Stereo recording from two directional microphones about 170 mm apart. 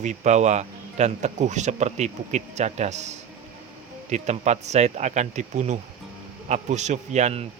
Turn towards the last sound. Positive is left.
turn(degrees=-40)  # may be behind; listen again after turning